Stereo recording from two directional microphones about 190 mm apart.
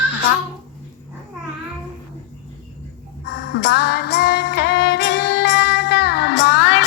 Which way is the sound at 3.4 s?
65° left (ahead or behind).